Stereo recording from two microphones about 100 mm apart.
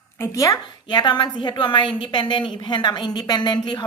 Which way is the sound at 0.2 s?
35° left (ahead or behind).